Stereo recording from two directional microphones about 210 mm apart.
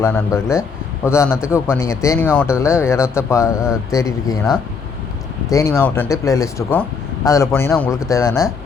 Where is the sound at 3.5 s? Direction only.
5° right (ahead or behind).